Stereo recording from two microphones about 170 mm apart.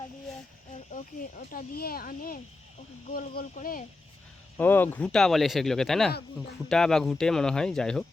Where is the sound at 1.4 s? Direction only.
60° left (ahead or behind).